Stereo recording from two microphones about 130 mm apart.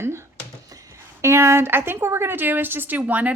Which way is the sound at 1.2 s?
20° right (ahead or behind).